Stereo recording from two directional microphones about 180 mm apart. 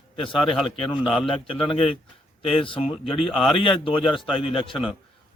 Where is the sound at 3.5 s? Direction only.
30° left (ahead or behind).